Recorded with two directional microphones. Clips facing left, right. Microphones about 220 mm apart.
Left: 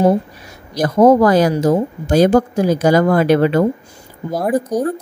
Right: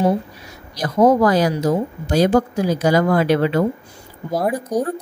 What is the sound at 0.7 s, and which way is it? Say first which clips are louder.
Speech: left 4 dB; 50° left (ahead or behind).